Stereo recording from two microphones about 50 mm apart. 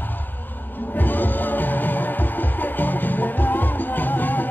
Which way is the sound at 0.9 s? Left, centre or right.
Left.